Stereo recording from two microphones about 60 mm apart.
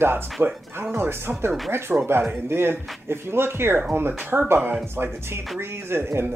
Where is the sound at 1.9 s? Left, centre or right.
Right.